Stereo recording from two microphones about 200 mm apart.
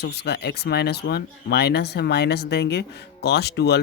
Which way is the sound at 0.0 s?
55° left (ahead or behind).